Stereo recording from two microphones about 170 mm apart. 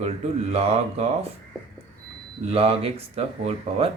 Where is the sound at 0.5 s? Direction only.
35° right (ahead or behind).